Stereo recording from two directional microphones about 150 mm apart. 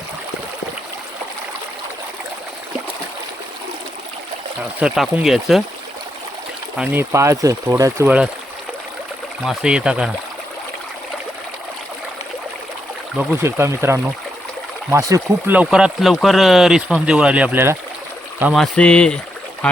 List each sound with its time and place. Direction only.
4.8 s speech: 10° right (ahead or behind)
6.7 s speech: 15° right (ahead or behind)
9.5 s speech: 5° right (ahead or behind)
13.4 s speech: 15° right (ahead or behind)
15.5 s speech: 5° right (ahead or behind)
18.5 s speech: 5° left (ahead or behind)